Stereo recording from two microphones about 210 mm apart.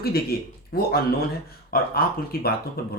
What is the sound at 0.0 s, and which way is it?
Speech, 45° left (ahead or behind).